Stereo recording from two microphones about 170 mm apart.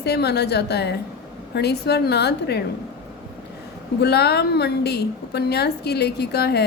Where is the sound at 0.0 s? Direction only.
75° left (ahead or behind).